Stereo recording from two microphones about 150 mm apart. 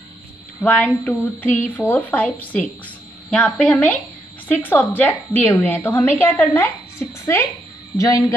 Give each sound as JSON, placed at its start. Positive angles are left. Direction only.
{"t": 0.6, "sound": "a woman's voice", "side_deg": 10}